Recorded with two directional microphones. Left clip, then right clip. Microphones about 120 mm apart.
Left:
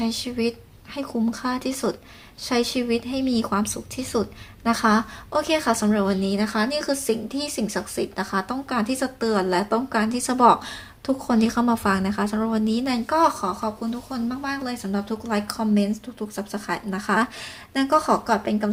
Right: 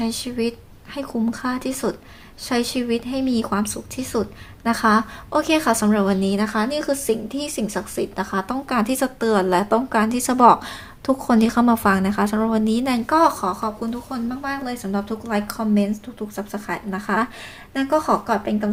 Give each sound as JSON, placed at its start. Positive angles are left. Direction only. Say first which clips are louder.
{"t": 0.0, "sound": "speech", "louder": "right 1 dB", "side_deg": -15}
{"t": 5.3, "sound": "a woman's voice", "louder": "right 3 dB", "side_deg": -30}
{"t": 8.7, "sound": "a woman's voice", "louder": "right 4 dB", "side_deg": -30}
{"t": 14.3, "sound": "a woman's voice", "louder": "right 1 dB", "side_deg": -5}